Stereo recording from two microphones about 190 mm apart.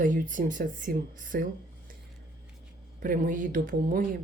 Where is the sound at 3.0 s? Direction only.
45° right (ahead or behind).